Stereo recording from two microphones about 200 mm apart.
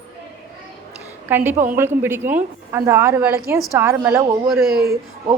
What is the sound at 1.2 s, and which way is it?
A woman's voice, 10° right (ahead or behind).